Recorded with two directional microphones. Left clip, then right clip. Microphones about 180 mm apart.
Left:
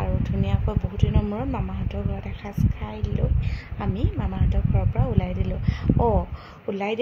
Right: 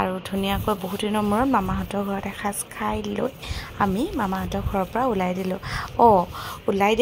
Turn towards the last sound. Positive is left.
turn(degrees=-25)  # may be behind; listen again after turning